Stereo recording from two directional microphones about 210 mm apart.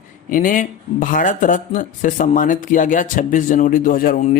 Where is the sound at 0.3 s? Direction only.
40° left (ahead or behind).